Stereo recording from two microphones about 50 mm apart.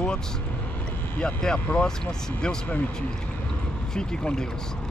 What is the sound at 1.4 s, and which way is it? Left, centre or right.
Speech, centre.